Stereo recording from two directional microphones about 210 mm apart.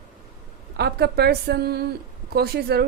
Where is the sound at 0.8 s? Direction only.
50° right (ahead or behind).